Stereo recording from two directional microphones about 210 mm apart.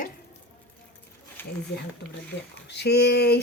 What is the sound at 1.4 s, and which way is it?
Speech, 10° left (ahead or behind).